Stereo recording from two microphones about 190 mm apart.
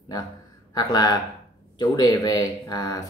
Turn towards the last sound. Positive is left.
turn(degrees=20)  # may be behind; listen again after turning